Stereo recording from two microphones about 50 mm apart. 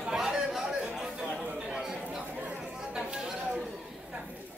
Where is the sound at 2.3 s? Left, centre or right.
Right.